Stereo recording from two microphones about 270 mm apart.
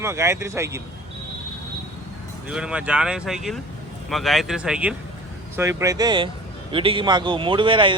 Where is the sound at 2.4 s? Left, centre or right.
Centre.